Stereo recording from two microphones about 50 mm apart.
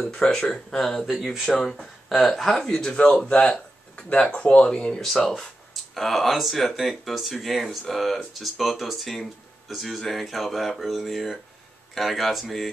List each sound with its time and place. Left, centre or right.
0.1 s speech: centre
5.0 s speech: centre